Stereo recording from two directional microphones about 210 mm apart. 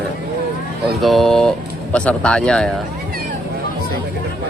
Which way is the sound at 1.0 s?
Centre (ahead or behind).